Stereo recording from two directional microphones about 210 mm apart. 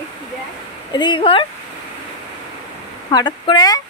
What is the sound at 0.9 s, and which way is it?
Speech, 20° left (ahead or behind).